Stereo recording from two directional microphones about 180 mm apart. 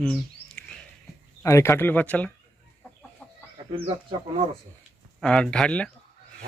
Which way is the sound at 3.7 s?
35° right (ahead or behind).